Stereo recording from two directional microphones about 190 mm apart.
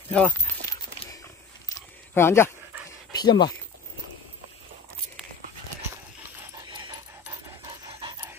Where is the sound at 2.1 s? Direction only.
15° left (ahead or behind).